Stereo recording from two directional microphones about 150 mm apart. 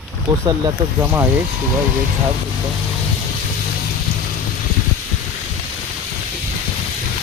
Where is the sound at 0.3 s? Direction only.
35° right (ahead or behind).